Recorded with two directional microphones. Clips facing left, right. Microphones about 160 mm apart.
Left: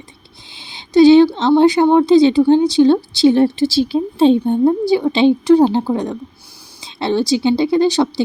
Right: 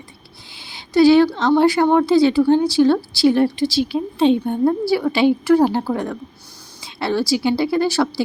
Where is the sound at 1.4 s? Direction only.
20° left (ahead or behind).